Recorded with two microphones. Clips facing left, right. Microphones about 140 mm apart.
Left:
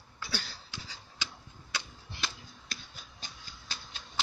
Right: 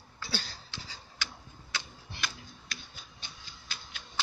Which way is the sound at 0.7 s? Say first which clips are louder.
Even; 20° left (ahead or behind).